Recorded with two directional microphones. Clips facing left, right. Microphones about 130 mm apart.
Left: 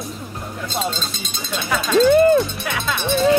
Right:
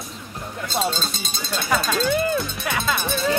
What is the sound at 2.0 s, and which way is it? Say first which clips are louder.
Speech: left 14 dB; 40° left (ahead or behind).